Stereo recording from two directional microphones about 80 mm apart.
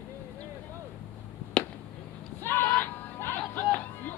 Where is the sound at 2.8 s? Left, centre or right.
Left.